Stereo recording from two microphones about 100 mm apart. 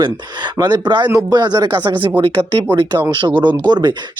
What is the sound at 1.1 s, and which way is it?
Speech, 35° right (ahead or behind).